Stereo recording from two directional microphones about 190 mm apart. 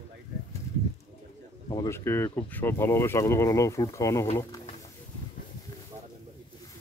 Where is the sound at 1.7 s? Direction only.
20° left (ahead or behind).